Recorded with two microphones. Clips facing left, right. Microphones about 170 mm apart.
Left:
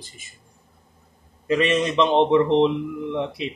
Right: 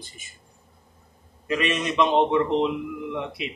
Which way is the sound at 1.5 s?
30° left (ahead or behind).